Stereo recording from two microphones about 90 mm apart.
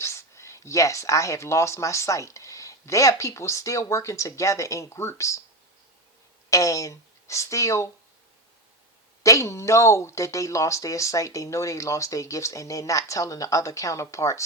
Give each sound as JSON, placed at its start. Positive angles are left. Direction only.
{"t": 0.0, "sound": "speech", "side_deg": 30}
{"t": 6.5, "sound": "speech", "side_deg": 40}
{"t": 9.2, "sound": "speech", "side_deg": 35}